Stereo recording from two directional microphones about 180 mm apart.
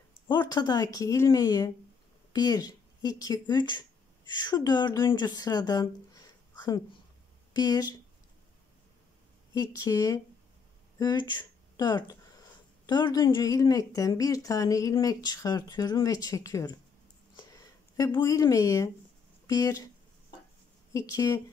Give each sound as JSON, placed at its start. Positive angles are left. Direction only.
{"t": 0.3, "sound": "speech", "side_deg": 25}
{"t": 7.5, "sound": "speech", "side_deg": 20}
{"t": 9.5, "sound": "speech", "side_deg": 20}
{"t": 17.4, "sound": "a sound", "side_deg": 20}
{"t": 19.4, "sound": "speech", "side_deg": 20}
{"t": 20.9, "sound": "speech", "side_deg": 20}